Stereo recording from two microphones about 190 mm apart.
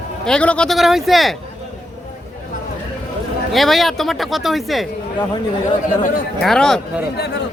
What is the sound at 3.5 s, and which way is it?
A man's voice, centre (ahead or behind).